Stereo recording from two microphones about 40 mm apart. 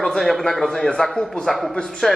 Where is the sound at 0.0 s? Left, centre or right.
Centre.